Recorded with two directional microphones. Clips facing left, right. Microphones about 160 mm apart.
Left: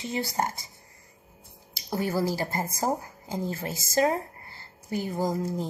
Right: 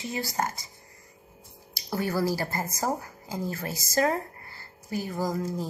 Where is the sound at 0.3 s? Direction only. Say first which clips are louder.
Left 1 dB; 25° left (ahead or behind).